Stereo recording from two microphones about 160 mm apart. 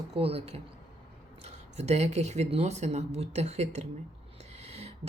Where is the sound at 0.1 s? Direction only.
35° right (ahead or behind).